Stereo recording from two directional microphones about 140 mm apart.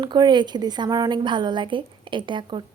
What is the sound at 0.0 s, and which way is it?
A woman's voice, 30° right (ahead or behind).